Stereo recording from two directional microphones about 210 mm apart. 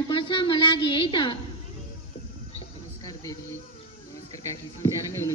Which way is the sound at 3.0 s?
15° left (ahead or behind).